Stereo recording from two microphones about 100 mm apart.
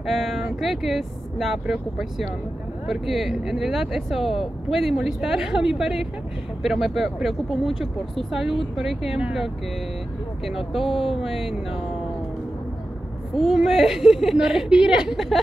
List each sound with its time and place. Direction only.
0.0 s speech: 5° right (ahead or behind)
13.4 s speech: 5° right (ahead or behind)